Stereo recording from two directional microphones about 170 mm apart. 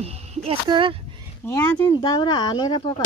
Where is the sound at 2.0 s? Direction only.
25° left (ahead or behind).